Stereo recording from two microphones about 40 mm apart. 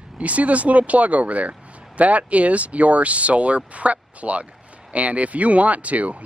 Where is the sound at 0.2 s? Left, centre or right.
Right.